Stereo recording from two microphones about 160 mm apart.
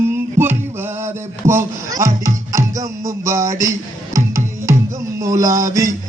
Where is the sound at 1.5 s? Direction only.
20° right (ahead or behind).